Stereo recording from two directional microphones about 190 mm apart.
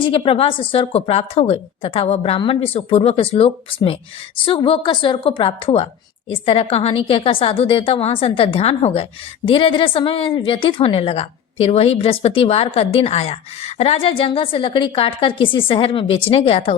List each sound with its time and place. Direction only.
0.1 s a woman's voice: 30° left (ahead or behind)